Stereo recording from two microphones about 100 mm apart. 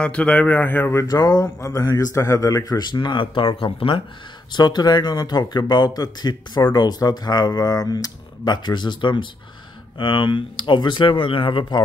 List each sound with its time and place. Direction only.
0.0 s speech: 15° left (ahead or behind)
1.0 s a man's voice: 40° left (ahead or behind); by 4.0 s 60° left (ahead or behind)
4.5 s speech: 45° left (ahead or behind)